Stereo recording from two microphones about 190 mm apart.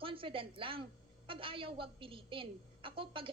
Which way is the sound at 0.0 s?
25° right (ahead or behind).